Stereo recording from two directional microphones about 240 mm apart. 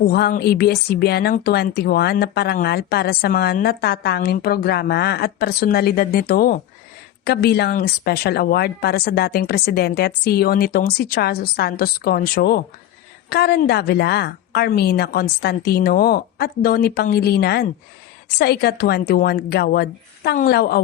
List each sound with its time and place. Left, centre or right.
0.0 s speech: left